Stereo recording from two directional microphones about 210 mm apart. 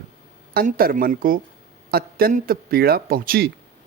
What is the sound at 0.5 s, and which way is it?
A man's voice, 45° right (ahead or behind).